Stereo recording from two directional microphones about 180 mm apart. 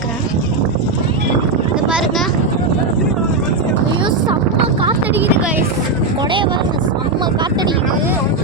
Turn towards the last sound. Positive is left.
turn(degrees=-25)  # may be behind; listen again after turning